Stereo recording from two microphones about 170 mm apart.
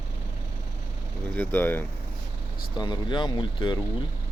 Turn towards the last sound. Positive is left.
turn(degrees=25)  # may be behind; listen again after turning